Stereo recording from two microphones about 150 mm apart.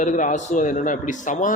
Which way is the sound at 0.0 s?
55° left (ahead or behind).